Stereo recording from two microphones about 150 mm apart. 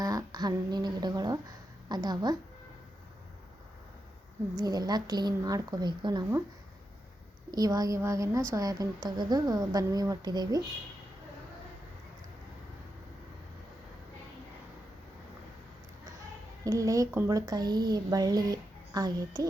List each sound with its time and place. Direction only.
0.0 s a sound: 25° right (ahead or behind)
1.9 s a woman's voice: 25° right (ahead or behind)
4.5 s a woman's voice: 25° right (ahead or behind)
7.5 s a woman's voice: 25° right (ahead or behind)
16.6 s a woman's voice: 20° right (ahead or behind)